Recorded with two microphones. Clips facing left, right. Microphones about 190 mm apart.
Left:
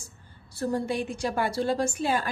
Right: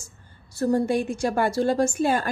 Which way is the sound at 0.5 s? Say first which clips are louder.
Right 6 dB; 45° right (ahead or behind).